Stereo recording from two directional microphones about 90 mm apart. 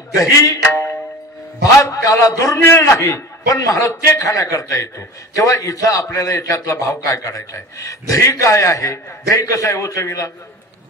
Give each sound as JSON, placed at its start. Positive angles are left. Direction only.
{"t": 0.1, "sound": "music", "side_deg": 35}
{"t": 1.6, "sound": "a man's voice", "side_deg": 40}